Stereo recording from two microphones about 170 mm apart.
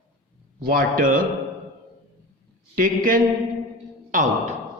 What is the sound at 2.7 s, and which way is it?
A man's voice, 55° right (ahead or behind).